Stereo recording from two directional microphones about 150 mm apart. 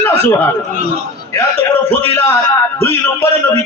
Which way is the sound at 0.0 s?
15° left (ahead or behind).